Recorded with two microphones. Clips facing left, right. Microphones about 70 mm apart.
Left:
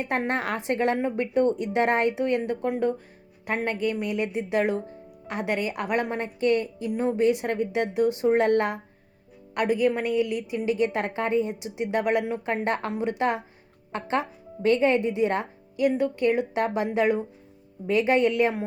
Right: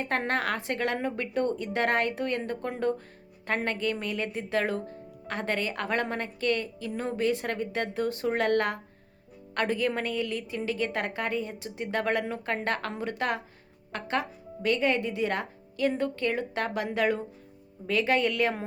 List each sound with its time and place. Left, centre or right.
0.0 s speech: centre